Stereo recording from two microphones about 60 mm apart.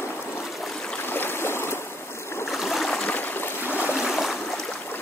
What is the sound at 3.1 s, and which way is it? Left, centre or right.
Boat, left.